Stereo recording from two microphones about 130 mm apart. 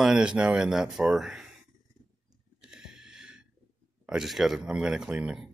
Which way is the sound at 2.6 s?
5° right (ahead or behind).